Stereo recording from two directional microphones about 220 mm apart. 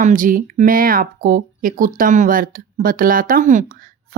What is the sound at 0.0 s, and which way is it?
Speech, 35° right (ahead or behind).